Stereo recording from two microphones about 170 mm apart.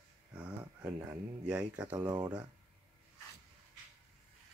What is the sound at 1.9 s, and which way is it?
Speech, 25° right (ahead or behind).